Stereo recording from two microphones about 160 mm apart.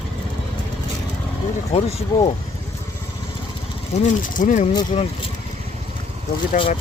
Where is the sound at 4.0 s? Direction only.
50° left (ahead or behind).